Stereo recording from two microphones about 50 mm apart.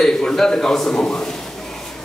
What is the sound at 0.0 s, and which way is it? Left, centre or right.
Speech, centre.